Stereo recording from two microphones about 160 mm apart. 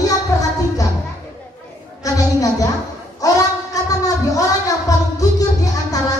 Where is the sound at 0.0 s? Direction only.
20° left (ahead or behind).